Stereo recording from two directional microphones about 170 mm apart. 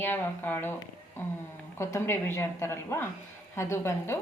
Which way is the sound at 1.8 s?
15° left (ahead or behind).